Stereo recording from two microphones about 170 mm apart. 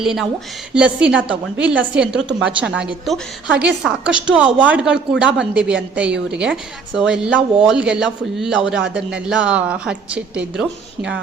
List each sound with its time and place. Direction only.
0.0 s a woman's voice: centre (ahead or behind)